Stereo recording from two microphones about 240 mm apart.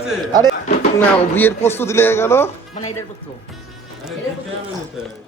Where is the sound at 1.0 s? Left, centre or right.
Centre.